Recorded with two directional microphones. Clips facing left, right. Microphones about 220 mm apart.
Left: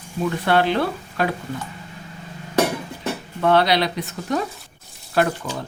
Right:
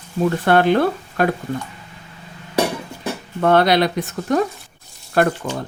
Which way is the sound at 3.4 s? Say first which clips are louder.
Right 3 dB; 50° right (ahead or behind).